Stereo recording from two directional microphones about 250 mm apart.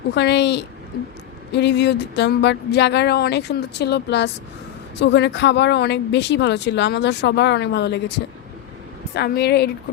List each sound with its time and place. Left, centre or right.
0.1 s speech: left
9.1 s a woman's voice: left